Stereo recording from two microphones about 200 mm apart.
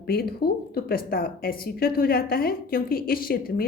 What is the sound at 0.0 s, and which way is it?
A woman's voice, 50° left (ahead or behind).